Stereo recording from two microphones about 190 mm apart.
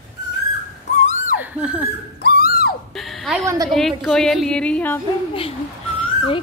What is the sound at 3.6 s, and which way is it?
Speech, centre (ahead or behind).